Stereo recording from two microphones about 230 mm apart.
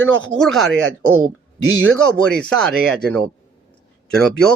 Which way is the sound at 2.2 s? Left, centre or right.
Centre.